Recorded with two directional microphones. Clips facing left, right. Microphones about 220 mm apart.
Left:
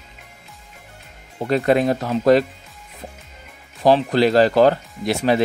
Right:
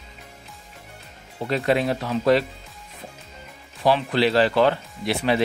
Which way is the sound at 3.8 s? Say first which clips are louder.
Left 5 dB; 40° left (ahead or behind).